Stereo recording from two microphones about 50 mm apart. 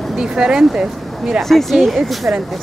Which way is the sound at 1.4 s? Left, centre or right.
Centre.